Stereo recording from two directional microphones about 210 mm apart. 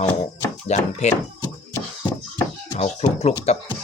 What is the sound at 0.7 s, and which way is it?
Speech, 35° left (ahead or behind).